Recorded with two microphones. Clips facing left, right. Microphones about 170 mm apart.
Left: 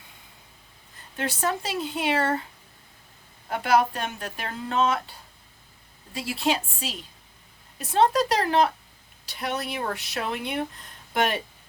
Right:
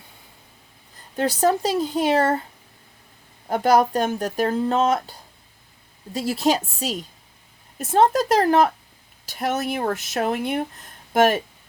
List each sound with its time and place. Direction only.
1.1 s speech: 40° right (ahead or behind)
3.5 s speech: 40° right (ahead or behind)
6.1 s speech: 40° right (ahead or behind)